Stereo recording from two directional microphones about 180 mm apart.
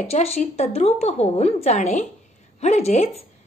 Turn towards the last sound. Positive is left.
turn(degrees=35)  # may be behind; listen again after turning